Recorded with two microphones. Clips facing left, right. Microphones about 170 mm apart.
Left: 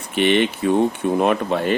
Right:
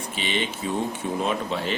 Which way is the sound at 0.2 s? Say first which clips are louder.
Left 12 dB; 60° left (ahead or behind).